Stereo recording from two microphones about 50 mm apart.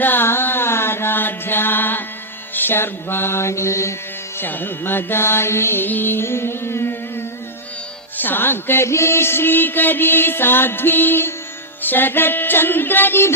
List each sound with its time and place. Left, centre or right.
0.0 s music: left
2.6 s mantra: left
4.4 s music: left
8.2 s music: left
8.9 s music: left